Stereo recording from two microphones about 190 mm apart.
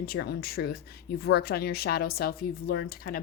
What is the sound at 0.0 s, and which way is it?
A woman's voice, 55° left (ahead or behind).